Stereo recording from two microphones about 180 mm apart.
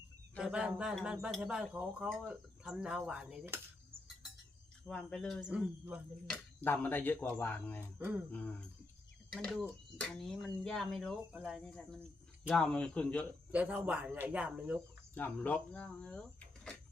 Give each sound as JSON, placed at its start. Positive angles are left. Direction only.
{"t": 0.3, "sound": "speech", "side_deg": -5}
{"t": 4.9, "sound": "speech", "side_deg": 5}
{"t": 6.2, "sound": "speech", "side_deg": 5}
{"t": 7.9, "sound": "speech", "side_deg": -10}
{"t": 8.3, "sound": "speech", "side_deg": 10}
{"t": 13.5, "sound": "speech", "side_deg": -10}
{"t": 15.1, "sound": "speech", "side_deg": 10}